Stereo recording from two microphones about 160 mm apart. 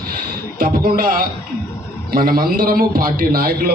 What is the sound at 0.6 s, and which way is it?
A man's voice, 60° right (ahead or behind).